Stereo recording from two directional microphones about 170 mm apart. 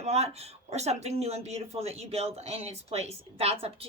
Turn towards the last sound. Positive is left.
turn(degrees=-35)  # may be behind; listen again after turning